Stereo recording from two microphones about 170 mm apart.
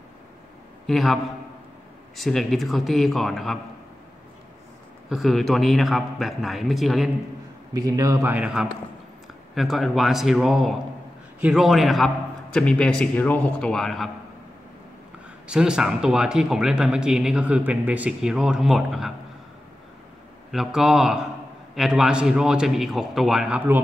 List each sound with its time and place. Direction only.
0.8 s speech: centre (ahead or behind)
5.1 s speech: centre (ahead or behind)
7.7 s speech: 20° right (ahead or behind); by 14.1 s centre (ahead or behind)
15.4 s speech: 5° right (ahead or behind)
20.5 s speech: centre (ahead or behind)